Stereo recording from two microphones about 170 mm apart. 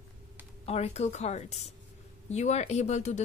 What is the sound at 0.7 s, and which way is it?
Speech, 40° left (ahead or behind).